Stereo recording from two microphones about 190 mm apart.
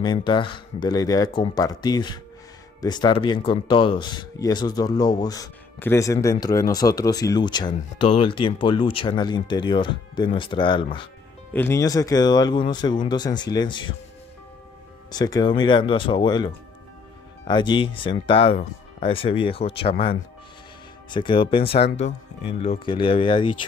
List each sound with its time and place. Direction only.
0.0 s speech: 25° left (ahead or behind)
11.5 s speech: 15° left (ahead or behind)
15.0 s speech: 20° left (ahead or behind)
17.5 s speech: 25° left (ahead or behind)